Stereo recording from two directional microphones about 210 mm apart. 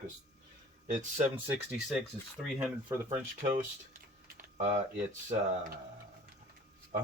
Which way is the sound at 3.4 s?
40° right (ahead or behind).